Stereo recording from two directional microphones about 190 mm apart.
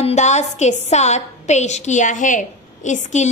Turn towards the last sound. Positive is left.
turn(degrees=40)  # may be behind; listen again after turning